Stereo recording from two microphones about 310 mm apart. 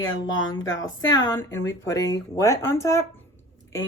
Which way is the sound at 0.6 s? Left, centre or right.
Left.